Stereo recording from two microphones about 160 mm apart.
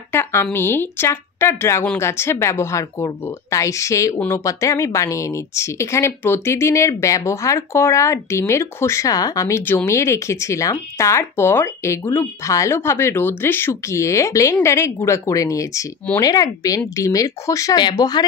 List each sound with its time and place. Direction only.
0.1 s a woman's voice: 15° left (ahead or behind)